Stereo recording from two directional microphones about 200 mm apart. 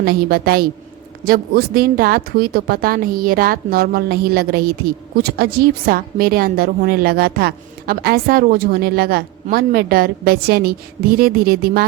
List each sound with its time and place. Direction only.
0.0 s speech: 50° right (ahead or behind)